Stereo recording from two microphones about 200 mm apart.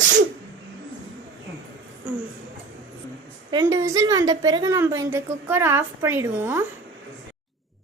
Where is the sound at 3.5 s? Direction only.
20° right (ahead or behind).